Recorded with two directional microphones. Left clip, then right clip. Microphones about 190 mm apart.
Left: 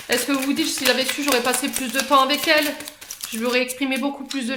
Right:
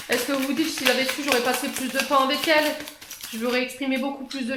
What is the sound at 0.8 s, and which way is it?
Speech, 35° left (ahead or behind).